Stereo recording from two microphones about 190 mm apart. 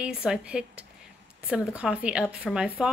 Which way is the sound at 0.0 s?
5° right (ahead or behind).